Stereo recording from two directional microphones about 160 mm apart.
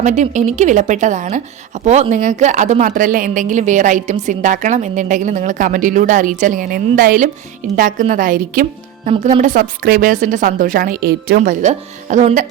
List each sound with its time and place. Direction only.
0.0 s a woman's voice: 50° right (ahead or behind)
9.0 s speech: 40° right (ahead or behind)
9.4 s a woman's voice: 60° right (ahead or behind)
11.3 s a woman's voice: 50° right (ahead or behind)